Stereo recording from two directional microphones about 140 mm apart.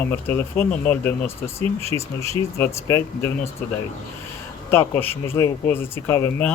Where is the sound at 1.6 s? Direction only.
45° right (ahead or behind).